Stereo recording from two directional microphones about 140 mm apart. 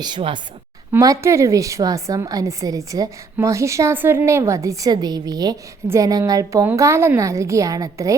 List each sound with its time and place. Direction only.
0.0 s a woman's voice: 35° right (ahead or behind)
0.9 s a woman's voice: 20° right (ahead or behind)